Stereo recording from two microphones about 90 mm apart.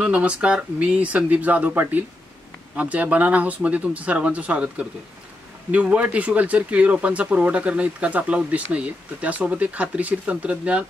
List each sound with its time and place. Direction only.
0.0 s speech: 15° right (ahead or behind)